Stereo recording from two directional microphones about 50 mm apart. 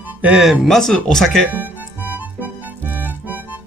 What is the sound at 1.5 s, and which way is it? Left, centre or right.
Music, right.